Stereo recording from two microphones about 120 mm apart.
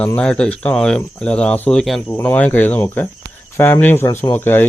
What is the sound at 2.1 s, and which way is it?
Speech, 15° left (ahead or behind).